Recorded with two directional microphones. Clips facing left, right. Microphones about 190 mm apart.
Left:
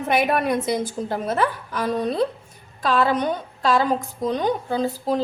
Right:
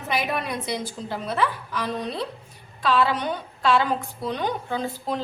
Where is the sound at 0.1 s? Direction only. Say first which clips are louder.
Left 6 dB; 50° left (ahead or behind).